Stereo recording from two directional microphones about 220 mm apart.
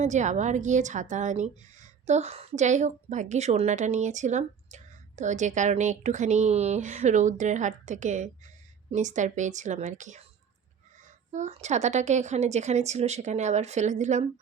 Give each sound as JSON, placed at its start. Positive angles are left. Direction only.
{"t": 0.0, "sound": "a woman's voice", "side_deg": -30}
{"t": 11.3, "sound": "a woman's voice", "side_deg": -30}